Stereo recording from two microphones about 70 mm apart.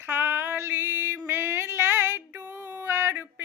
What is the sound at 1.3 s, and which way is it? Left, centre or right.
Female singing, right.